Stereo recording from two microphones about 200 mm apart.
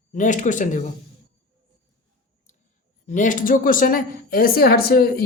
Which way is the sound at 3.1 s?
40° left (ahead or behind).